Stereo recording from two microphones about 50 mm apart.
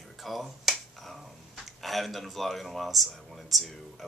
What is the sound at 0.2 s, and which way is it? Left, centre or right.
Finger snapping, centre.